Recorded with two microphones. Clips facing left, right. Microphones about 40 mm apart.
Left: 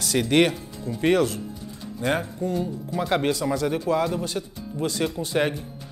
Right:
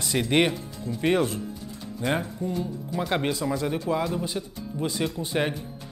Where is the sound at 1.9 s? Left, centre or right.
Centre.